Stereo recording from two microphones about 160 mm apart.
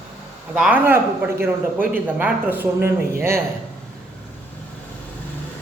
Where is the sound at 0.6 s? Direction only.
10° right (ahead or behind).